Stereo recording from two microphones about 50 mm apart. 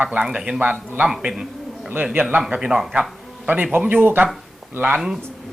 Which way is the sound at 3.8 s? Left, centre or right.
Right.